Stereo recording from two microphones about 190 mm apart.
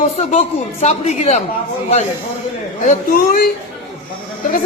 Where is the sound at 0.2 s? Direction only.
35° left (ahead or behind).